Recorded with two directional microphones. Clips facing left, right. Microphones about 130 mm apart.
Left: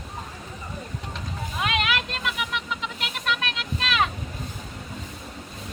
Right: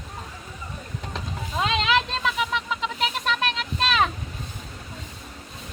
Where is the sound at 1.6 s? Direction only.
25° right (ahead or behind).